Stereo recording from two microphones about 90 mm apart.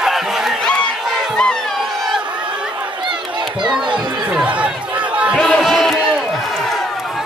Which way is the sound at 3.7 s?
10° right (ahead or behind).